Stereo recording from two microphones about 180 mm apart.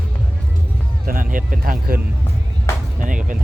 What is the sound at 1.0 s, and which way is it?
Speech, 50° right (ahead or behind).